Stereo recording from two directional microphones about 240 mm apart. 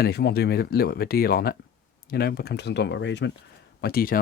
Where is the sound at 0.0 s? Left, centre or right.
Left.